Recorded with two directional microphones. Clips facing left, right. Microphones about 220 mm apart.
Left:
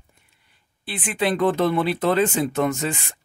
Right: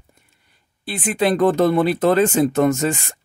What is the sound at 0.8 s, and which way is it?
Speech, 40° right (ahead or behind).